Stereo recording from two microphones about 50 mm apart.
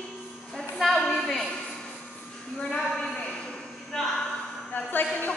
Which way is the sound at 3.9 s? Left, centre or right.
Centre.